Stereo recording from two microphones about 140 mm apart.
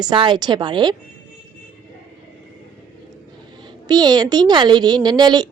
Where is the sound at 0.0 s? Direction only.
35° right (ahead or behind).